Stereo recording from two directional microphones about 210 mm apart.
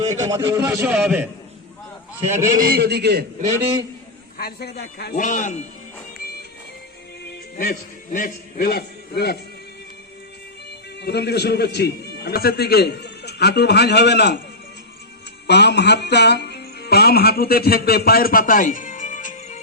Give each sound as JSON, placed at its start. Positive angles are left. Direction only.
{"t": 0.3, "sound": "a man's voice", "side_deg": -15}
{"t": 0.7, "sound": "a man's voice", "side_deg": 0}
{"t": 2.6, "sound": "a man's voice", "side_deg": -50}
{"t": 4.4, "sound": "a man's voice", "side_deg": 50}
{"t": 7.5, "sound": "a man's voice", "side_deg": 40}
{"t": 11.0, "sound": "a man's voice", "side_deg": 50}
{"t": 15.4, "sound": "speech", "side_deg": 55}